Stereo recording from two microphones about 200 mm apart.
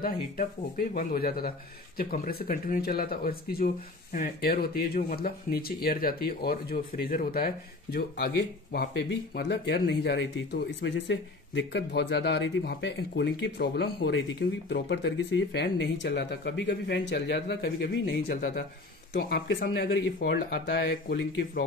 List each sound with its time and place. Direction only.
0.0 s speech: 45° left (ahead or behind); by 21.5 s 60° left (ahead or behind)